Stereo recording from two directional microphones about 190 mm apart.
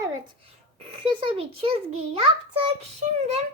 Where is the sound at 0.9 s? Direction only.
30° right (ahead or behind).